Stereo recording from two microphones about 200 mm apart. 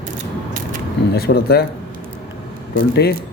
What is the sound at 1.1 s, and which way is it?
Speech, 50° left (ahead or behind).